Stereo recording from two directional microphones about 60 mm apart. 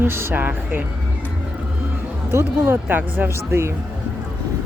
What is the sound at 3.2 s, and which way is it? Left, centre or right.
Speech, right.